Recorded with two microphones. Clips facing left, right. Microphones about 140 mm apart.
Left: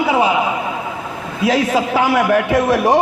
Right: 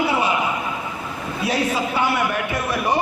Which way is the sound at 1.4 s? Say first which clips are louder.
Left 7 dB; 90° left.